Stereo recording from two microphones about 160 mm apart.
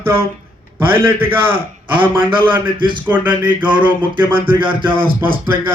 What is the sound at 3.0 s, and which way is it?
A man's voice, 10° right (ahead or behind).